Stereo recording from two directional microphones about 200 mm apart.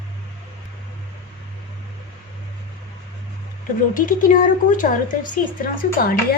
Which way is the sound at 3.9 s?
45° left (ahead or behind).